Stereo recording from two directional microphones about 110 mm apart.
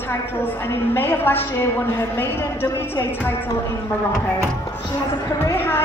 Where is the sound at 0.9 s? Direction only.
20° left (ahead or behind).